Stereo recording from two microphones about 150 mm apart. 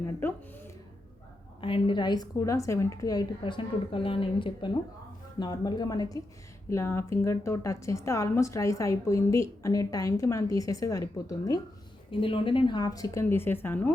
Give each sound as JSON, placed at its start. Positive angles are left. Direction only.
{"t": 0.2, "sound": "a sound", "side_deg": 15}
{"t": 1.6, "sound": "a woman's voice", "side_deg": 35}
{"t": 12.1, "sound": "a woman's voice", "side_deg": 35}